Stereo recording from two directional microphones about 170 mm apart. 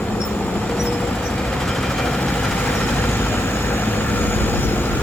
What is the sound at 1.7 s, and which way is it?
Vehicle, centre (ahead or behind).